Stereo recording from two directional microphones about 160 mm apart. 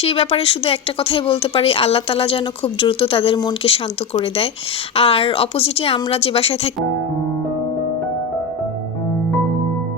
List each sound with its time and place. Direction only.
0.0 s speech: 40° left (ahead or behind)